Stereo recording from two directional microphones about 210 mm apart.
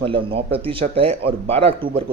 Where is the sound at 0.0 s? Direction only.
25° right (ahead or behind).